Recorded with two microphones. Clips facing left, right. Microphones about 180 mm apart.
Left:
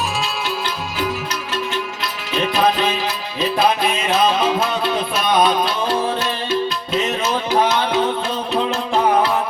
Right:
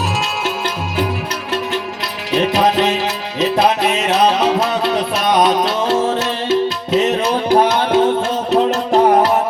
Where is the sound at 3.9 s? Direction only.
75° right (ahead or behind).